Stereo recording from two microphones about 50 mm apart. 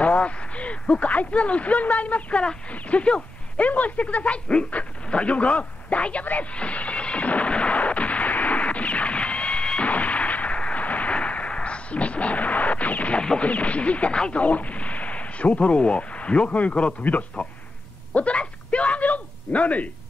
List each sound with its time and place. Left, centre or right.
0.0 s speech: left
6.5 s music: left
9.8 s artillery fire: left
13.4 s speech: left
18.1 s a sound: left